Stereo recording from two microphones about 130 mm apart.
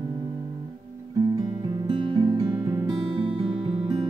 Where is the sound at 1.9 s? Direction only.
40° right (ahead or behind).